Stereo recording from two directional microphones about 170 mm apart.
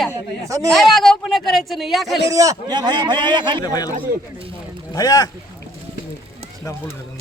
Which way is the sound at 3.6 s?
20° left (ahead or behind).